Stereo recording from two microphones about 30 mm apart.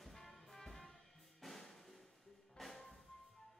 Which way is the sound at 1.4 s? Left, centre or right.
Centre.